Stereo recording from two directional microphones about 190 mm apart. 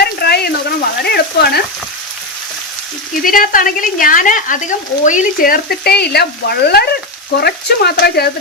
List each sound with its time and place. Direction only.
0.0 s a sound: 60° left (ahead or behind)
1.0 s frying: 60° left (ahead or behind)
3.2 s speech: 45° left (ahead or behind)